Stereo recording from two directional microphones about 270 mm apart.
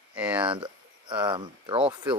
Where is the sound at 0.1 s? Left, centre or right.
Centre.